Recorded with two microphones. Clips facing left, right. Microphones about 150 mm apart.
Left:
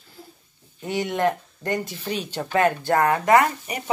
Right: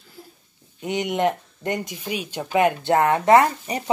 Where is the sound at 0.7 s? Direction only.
20° right (ahead or behind).